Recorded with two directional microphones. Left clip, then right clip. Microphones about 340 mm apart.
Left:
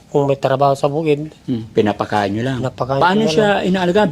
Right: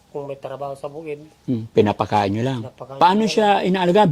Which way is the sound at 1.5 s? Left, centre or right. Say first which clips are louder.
Left 1 dB; right.